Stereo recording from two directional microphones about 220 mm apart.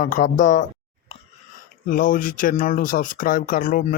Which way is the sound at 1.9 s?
40° left (ahead or behind).